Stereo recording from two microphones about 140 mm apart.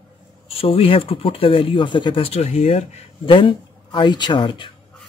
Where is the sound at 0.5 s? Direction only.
40° left (ahead or behind).